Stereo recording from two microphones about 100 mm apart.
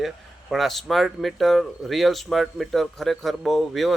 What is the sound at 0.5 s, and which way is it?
Speech, centre (ahead or behind).